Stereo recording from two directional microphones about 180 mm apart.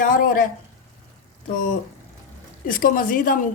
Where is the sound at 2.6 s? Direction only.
50° left (ahead or behind).